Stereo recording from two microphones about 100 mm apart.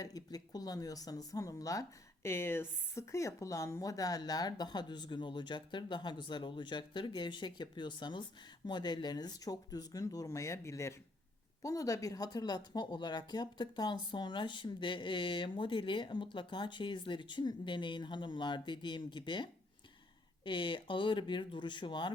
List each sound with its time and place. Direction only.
0.0 s speech: 40° left (ahead or behind)